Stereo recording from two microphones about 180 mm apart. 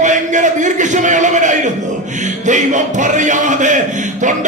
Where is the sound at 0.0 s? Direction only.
45° right (ahead or behind).